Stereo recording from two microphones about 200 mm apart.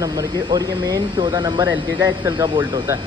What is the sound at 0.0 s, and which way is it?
Speech, 20° right (ahead or behind).